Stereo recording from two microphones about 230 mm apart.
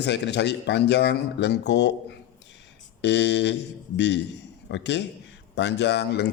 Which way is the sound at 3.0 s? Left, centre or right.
Left.